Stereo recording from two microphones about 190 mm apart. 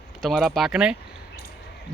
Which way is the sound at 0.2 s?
Centre (ahead or behind).